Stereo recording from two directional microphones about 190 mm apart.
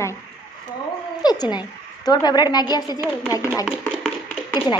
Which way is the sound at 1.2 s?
20° left (ahead or behind).